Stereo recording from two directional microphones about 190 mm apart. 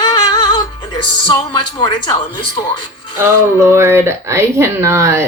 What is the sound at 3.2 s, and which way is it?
A woman's voice, 15° right (ahead or behind).